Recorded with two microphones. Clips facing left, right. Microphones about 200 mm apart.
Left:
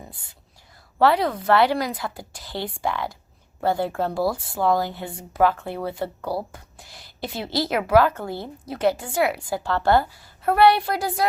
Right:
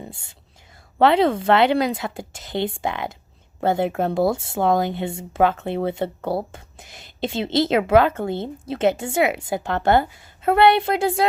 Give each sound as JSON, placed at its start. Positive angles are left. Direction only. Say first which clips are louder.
{"t": 0.1, "sound": "a woman's voice", "louder": "right 5 dB", "side_deg": -25}